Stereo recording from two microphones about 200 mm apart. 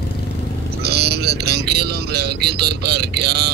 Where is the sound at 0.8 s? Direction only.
55° right (ahead or behind).